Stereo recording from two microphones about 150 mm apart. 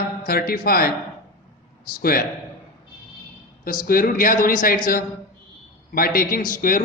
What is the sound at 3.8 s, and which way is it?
Speech, 75° left (ahead or behind).